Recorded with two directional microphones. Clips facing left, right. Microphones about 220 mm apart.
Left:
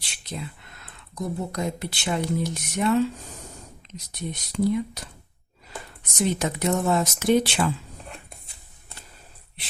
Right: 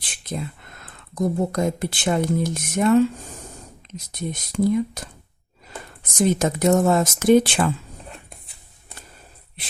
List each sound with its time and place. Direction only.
0.0 s speech: 50° right (ahead or behind)